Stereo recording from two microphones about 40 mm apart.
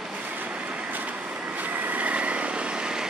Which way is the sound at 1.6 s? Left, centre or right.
Right.